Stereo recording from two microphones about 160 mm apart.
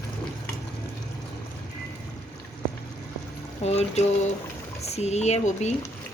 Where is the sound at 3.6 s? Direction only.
45° left (ahead or behind).